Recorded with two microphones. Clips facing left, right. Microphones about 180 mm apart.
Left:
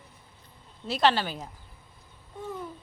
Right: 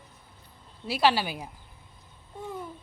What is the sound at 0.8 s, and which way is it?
Speech, 5° right (ahead or behind).